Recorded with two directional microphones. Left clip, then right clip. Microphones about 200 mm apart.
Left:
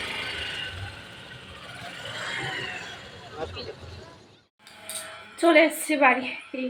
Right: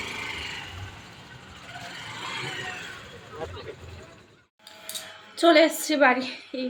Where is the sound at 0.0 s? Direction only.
50° right (ahead or behind).